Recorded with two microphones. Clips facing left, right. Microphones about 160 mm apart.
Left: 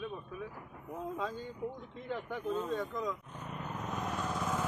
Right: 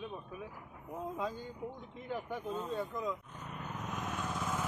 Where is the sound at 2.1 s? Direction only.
10° right (ahead or behind).